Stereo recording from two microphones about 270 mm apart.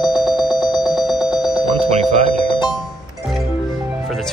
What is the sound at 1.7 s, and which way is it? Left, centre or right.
Alarm, right.